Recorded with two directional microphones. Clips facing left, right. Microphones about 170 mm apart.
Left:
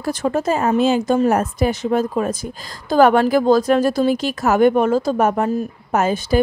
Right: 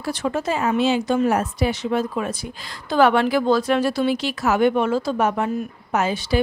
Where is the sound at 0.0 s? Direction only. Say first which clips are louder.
Left 4 dB; 45° left (ahead or behind).